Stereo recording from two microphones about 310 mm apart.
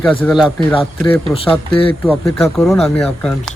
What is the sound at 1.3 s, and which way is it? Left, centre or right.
Speech, centre.